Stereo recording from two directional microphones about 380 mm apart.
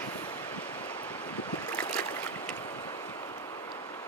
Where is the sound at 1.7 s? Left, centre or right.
Centre.